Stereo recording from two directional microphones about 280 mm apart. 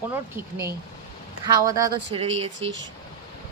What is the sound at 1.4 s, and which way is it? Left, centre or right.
Speech, centre.